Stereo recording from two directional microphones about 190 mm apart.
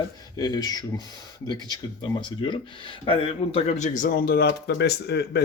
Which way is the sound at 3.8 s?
45° left (ahead or behind).